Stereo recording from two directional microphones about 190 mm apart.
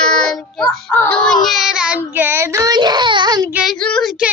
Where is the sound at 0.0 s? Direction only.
5° left (ahead or behind); by 3.5 s 20° right (ahead or behind).